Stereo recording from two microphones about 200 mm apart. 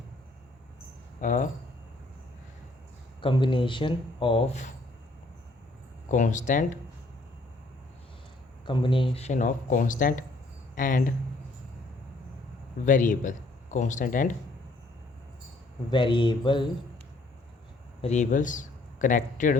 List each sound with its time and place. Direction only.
1.2 s speech: 40° left (ahead or behind)
3.2 s speech: 25° left (ahead or behind)
6.1 s speech: 40° left (ahead or behind)
8.6 s speech: 25° left (ahead or behind); by 11.1 s 40° left (ahead or behind)
12.8 s speech: 40° left (ahead or behind)
15.9 s speech: 25° left (ahead or behind)
18.0 s a man's voice: 35° left (ahead or behind)